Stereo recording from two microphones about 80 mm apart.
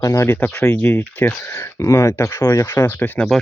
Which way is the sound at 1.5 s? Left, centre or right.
Left.